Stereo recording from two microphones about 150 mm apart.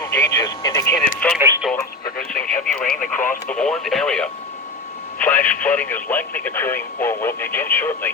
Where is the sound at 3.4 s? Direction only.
5° left (ahead or behind).